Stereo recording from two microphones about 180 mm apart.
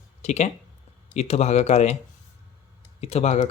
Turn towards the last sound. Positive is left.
turn(degrees=35)  # may be behind; listen again after turning